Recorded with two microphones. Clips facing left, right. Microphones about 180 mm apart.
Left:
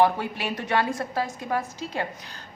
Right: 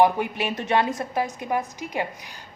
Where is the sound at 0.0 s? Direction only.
20° right (ahead or behind).